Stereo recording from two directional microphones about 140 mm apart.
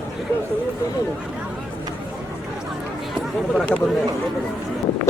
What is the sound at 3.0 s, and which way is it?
Speech, centre (ahead or behind).